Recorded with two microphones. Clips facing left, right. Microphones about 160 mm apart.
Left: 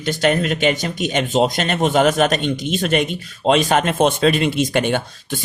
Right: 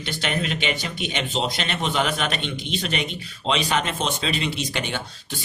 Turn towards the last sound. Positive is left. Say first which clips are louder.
# left 9 dB
turn(degrees=50)  # may be behind; listen again after turning